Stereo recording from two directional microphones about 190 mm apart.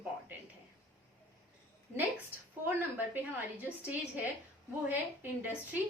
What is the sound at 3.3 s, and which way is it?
A woman's voice, 10° right (ahead or behind).